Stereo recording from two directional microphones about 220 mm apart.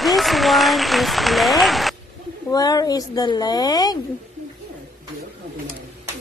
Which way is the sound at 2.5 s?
15° left (ahead or behind).